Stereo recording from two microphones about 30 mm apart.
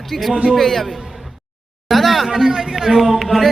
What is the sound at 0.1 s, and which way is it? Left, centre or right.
Speech, centre.